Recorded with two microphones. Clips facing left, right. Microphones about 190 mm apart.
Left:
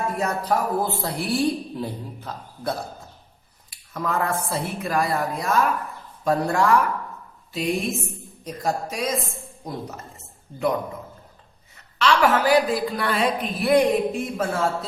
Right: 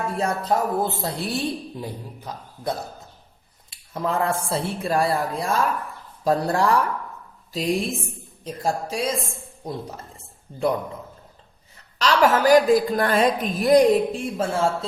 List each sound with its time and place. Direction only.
0.2 s speech: 25° right (ahead or behind)
3.7 s speech: 30° right (ahead or behind)
11.9 s a woman's voice: 40° right (ahead or behind)